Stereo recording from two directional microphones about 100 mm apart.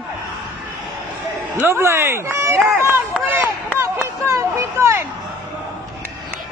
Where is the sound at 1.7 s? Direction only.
25° right (ahead or behind).